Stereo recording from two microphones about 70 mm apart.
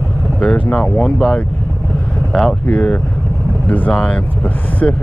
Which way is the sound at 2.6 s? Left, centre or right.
Centre.